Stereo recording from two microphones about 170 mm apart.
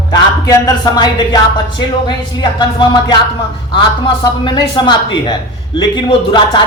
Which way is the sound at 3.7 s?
30° left (ahead or behind).